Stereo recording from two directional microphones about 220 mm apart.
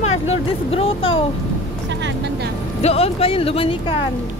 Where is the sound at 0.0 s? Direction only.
30° left (ahead or behind).